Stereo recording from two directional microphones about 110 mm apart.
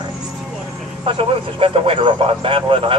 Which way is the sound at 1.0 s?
55° right (ahead or behind).